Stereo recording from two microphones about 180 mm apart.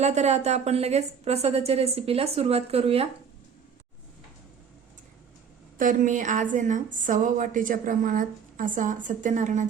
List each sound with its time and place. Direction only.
0.0 s a woman's voice: 40° right (ahead or behind)
5.7 s a woman's voice: 50° right (ahead or behind)